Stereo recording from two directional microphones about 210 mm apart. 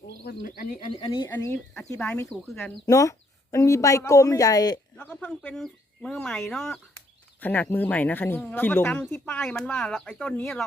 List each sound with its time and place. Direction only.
0.4 s speech: 40° left (ahead or behind)
0.9 s speech: 25° left (ahead or behind)
1.3 s speech: 10° left (ahead or behind)
4.9 s speech: 5° left (ahead or behind)